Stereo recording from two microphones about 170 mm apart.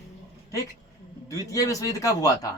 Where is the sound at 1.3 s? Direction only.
20° left (ahead or behind).